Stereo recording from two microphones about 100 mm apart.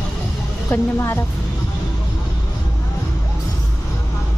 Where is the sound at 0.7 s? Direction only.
25° left (ahead or behind).